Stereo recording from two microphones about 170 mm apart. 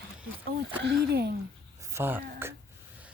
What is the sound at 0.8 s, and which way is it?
Speech, 75° right (ahead or behind).